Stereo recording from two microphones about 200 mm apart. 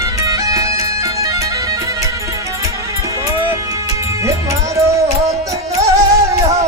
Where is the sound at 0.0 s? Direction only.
15° right (ahead or behind).